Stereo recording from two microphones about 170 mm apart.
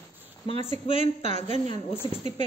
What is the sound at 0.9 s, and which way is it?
Speech, 45° right (ahead or behind).